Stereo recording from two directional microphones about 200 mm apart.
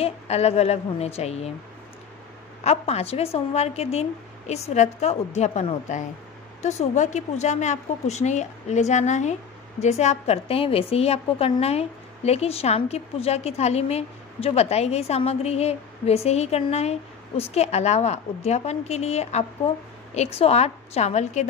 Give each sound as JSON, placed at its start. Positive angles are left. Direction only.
{"t": 0.0, "sound": "a woman's voice", "side_deg": 30}
{"t": 2.6, "sound": "a woman's voice", "side_deg": 30}